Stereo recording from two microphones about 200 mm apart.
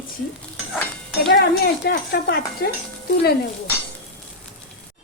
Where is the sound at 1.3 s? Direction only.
50° left (ahead or behind).